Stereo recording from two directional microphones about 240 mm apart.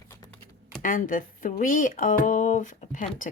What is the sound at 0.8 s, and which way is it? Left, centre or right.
Speech, left.